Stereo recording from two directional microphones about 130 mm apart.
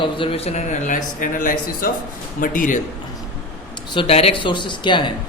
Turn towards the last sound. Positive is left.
turn(degrees=35)  # may be behind; listen again after turning